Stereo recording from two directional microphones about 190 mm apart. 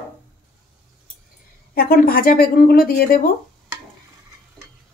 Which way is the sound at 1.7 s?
50° left (ahead or behind).